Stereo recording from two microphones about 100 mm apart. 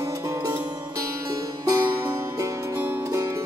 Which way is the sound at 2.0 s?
25° right (ahead or behind).